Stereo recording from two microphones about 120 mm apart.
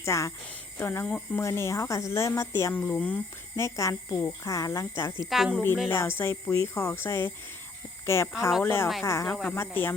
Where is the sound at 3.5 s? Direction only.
25° left (ahead or behind).